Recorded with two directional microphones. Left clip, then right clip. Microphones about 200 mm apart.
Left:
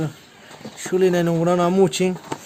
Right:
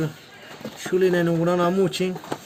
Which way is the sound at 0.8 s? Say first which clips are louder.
Left 2 dB; 50° left (ahead or behind).